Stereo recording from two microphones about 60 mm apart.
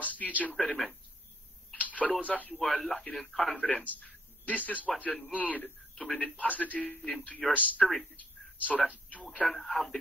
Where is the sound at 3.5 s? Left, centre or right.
Left.